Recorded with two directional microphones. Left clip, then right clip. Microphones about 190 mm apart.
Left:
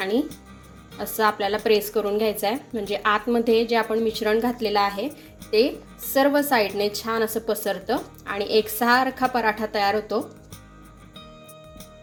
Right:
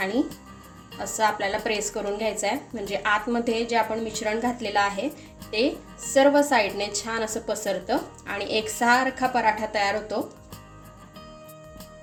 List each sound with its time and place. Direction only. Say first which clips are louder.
0.0 s a woman's voice: left 2 dB; 30° left (ahead or behind)